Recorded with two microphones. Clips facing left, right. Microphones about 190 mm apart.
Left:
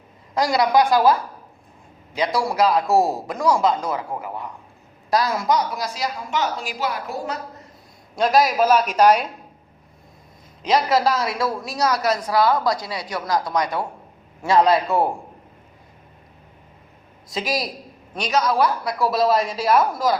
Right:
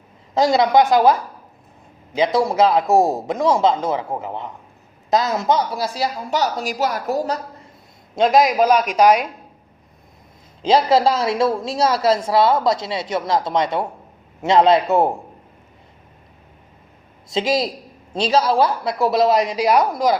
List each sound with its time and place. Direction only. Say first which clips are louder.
0.3 s a woman's voice: right 3 dB; 25° right (ahead or behind)
2.1 s a woman's voice: right 4 dB; 25° right (ahead or behind); by 7.3 s 40° right (ahead or behind)
8.1 s a woman's voice: right 3 dB; 20° right (ahead or behind)
10.6 s a woman's voice: right 4 dB; 25° right (ahead or behind)
17.2 s a woman's voice: right 6 dB; 25° right (ahead or behind)